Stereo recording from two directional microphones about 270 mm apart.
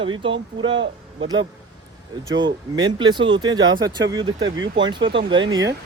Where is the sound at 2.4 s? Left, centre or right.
Centre.